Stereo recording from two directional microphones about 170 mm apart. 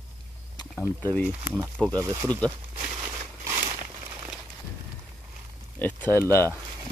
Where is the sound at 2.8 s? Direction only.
15° right (ahead or behind).